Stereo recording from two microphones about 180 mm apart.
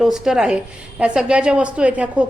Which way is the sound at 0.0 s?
Centre (ahead or behind).